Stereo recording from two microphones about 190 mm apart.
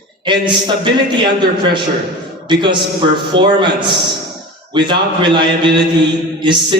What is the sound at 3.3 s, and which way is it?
A man's voice, 25° right (ahead or behind).